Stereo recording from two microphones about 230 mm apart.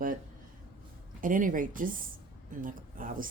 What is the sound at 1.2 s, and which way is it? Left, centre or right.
Speech, right.